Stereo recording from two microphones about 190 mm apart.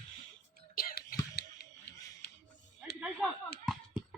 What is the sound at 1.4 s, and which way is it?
Music, 60° left (ahead or behind).